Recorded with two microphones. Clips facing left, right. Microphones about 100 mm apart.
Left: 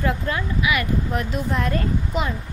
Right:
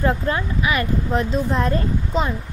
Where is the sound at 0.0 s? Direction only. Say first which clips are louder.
Right 3 dB; 35° right (ahead or behind).